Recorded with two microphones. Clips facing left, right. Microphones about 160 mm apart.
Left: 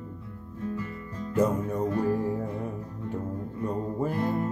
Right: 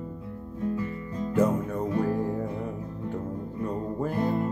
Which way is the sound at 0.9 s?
15° right (ahead or behind).